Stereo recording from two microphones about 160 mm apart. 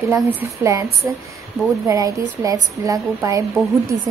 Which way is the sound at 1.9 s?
20° right (ahead or behind).